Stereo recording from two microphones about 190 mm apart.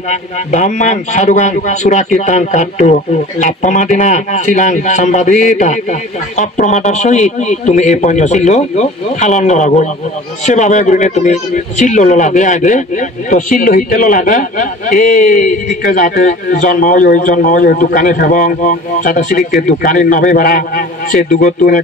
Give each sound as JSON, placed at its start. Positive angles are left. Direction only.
{"t": 0.1, "sound": "a man's voice", "side_deg": 40}